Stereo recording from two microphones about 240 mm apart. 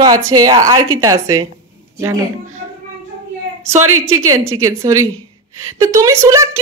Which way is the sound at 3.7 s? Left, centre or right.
Right.